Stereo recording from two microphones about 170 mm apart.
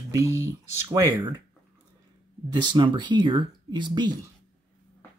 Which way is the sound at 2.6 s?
30° right (ahead or behind).